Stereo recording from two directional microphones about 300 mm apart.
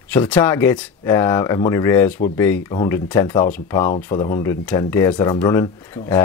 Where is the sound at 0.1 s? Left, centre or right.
Centre.